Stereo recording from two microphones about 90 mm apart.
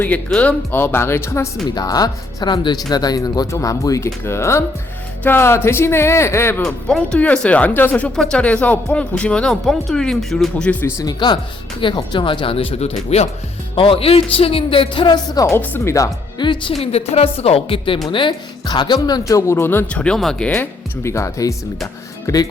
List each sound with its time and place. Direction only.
0.3 s speech: 15° left (ahead or behind); by 1.5 s 30° left (ahead or behind)
1.7 s speech: 45° left (ahead or behind); by 6.6 s 30° left (ahead or behind)
6.6 s speech: 5° left (ahead or behind)
8.1 s speech: 5° left (ahead or behind)
10.7 s speech: 20° left (ahead or behind)
11.0 s speech: 60° left (ahead or behind); by 12.7 s 90° left
13.7 s a man's voice: 90° left
15.1 s speech: 45° left (ahead or behind)
15.5 s speech: 25° left (ahead or behind)
16.4 s speech: 65° left (ahead or behind)
17.3 s a man's voice: 90° left
18.1 s speech: 65° left (ahead or behind); by 19.8 s 25° left (ahead or behind)
19.9 s speech: 10° left (ahead or behind)
20.5 s speech: 25° left (ahead or behind)